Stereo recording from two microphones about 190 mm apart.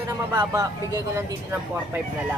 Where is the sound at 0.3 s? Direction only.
15° right (ahead or behind).